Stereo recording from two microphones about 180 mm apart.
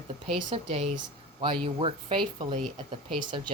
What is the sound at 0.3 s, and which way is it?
Speech, 35° right (ahead or behind).